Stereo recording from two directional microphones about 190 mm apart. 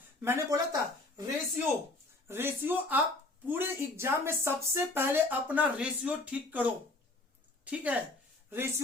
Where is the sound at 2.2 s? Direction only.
10° right (ahead or behind).